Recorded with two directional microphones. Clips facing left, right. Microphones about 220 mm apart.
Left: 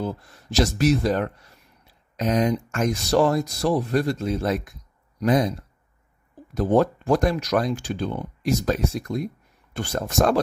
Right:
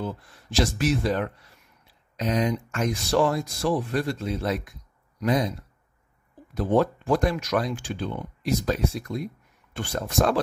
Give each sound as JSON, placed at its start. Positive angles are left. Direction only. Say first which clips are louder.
{"t": 0.0, "sound": "speech", "louder": "left 3 dB", "side_deg": 40}
{"t": 6.5, "sound": "speech", "louder": "left 3 dB", "side_deg": 40}